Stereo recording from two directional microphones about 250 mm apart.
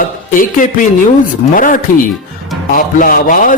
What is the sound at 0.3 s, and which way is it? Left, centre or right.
Speech, left.